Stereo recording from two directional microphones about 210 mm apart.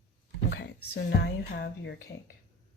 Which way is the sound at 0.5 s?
55° left (ahead or behind).